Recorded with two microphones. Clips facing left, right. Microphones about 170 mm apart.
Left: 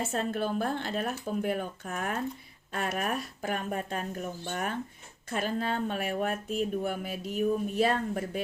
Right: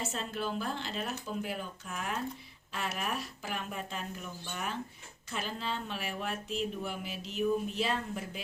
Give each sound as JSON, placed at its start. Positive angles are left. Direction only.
{"t": 0.0, "sound": "speech", "side_deg": 55}